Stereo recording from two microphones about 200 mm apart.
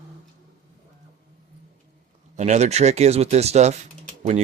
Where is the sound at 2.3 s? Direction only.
35° right (ahead or behind).